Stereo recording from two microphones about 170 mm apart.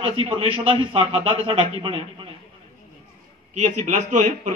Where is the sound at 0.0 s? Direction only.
35° right (ahead or behind).